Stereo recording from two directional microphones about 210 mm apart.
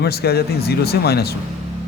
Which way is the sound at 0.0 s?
50° left (ahead or behind).